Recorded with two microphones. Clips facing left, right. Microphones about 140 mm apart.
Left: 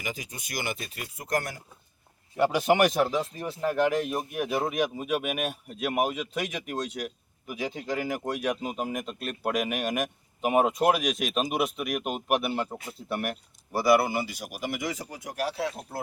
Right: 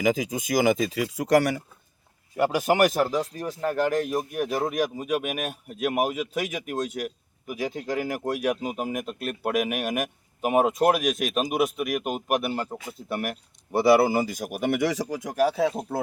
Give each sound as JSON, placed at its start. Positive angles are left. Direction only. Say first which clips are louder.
{"t": 0.5, "sound": "speech", "louder": "right 13 dB", "side_deg": -90}
{"t": 2.4, "sound": "speech", "louder": "right 1 dB", "side_deg": -5}
{"t": 13.7, "sound": "speech", "louder": "right 4 dB", "side_deg": -30}